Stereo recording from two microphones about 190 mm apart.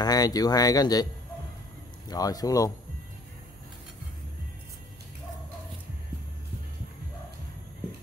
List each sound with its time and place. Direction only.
0.0 s speech: 20° left (ahead or behind)
2.0 s speech: 20° left (ahead or behind)